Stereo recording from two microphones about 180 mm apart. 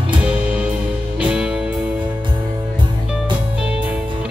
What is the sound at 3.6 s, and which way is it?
Music, 5° right (ahead or behind).